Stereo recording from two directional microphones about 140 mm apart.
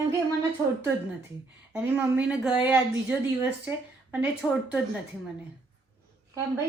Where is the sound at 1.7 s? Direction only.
15° right (ahead or behind).